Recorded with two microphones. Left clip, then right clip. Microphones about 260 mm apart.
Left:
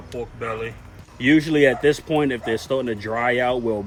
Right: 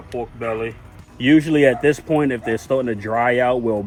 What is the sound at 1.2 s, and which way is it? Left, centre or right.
Speech, centre.